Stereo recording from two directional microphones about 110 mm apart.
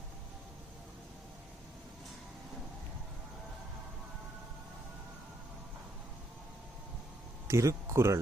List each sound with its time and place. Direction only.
7.4 s speech: 25° right (ahead or behind)